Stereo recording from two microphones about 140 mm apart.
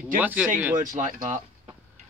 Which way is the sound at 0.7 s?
65° right (ahead or behind).